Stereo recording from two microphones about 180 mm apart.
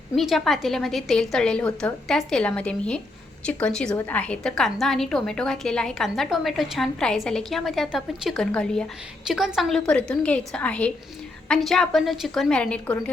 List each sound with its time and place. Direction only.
0.2 s a woman's voice: centre (ahead or behind)